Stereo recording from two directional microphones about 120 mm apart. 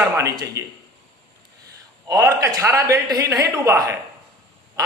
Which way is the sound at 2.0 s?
30° right (ahead or behind).